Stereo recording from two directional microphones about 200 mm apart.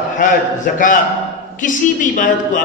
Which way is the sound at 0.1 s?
40° left (ahead or behind).